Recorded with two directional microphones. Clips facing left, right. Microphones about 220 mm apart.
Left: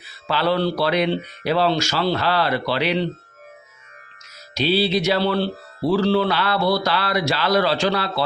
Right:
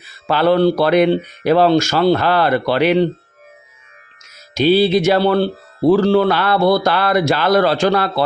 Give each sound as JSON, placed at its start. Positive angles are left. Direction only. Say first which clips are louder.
{"t": 0.3, "sound": "speech", "louder": "right 7 dB", "side_deg": -50}
{"t": 4.5, "sound": "speech", "louder": "right 7 dB", "side_deg": -50}